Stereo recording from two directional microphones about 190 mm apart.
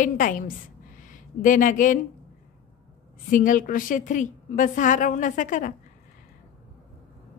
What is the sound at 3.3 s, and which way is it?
A woman's voice, 45° left (ahead or behind).